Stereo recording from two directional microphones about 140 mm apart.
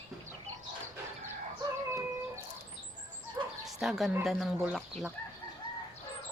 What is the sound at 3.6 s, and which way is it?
Speech, centre (ahead or behind).